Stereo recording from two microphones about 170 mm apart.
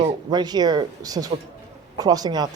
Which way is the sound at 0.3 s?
25° right (ahead or behind).